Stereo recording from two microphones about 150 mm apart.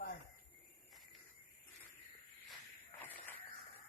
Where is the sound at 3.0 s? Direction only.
10° left (ahead or behind).